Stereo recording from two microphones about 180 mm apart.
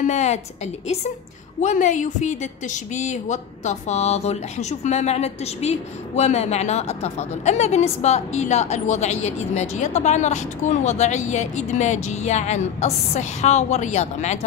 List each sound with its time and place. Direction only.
0.0 s a woman's voice: 40° left (ahead or behind)
1.6 s a woman's voice: 45° left (ahead or behind)